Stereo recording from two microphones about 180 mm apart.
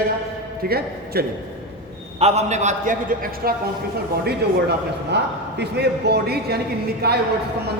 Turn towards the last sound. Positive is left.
turn(degrees=-60)  # may be behind; listen again after turning